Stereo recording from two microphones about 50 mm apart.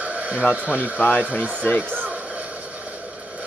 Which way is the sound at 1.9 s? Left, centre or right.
Right.